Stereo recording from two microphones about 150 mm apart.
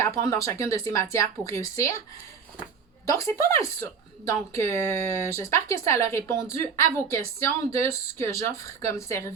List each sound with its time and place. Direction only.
0.3 s a woman's voice: 20° left (ahead or behind)
3.1 s a woman's voice: 20° left (ahead or behind)